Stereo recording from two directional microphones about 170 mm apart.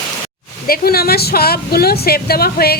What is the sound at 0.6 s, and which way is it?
Speech, 65° left (ahead or behind).